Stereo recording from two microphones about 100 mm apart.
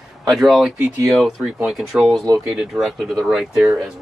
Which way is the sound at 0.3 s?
Centre (ahead or behind).